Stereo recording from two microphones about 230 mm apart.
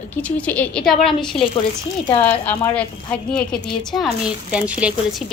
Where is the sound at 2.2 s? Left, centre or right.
Centre.